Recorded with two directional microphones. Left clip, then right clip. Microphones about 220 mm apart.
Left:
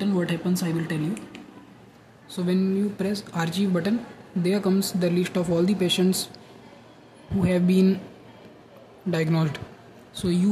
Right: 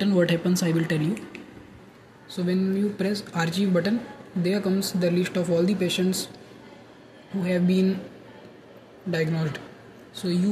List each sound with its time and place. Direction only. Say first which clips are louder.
0.0 s speech: right 4 dB; 5° right (ahead or behind)
2.3 s speech: left 1 dB; 10° left (ahead or behind)
7.4 s speech: left 2 dB; 15° left (ahead or behind)
9.1 s a man's voice: left 1 dB; 15° left (ahead or behind)